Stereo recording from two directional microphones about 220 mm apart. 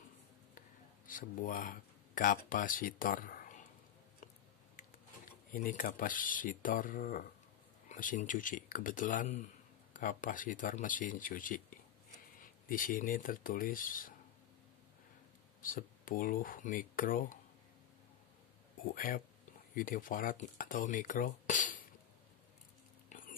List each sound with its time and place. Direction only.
1.0 s speech: 40° left (ahead or behind)
5.5 s speech: 40° left (ahead or behind)
15.6 s speech: 40° left (ahead or behind)
18.9 s speech: 40° left (ahead or behind)
23.0 s a sound: 35° left (ahead or behind)